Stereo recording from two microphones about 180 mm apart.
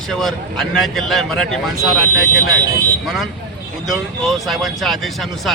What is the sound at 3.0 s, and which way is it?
Speech, centre (ahead or behind).